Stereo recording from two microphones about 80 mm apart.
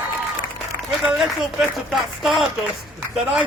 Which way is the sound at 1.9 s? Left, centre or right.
Centre.